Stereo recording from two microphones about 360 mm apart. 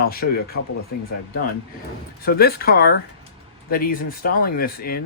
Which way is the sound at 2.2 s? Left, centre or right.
Left.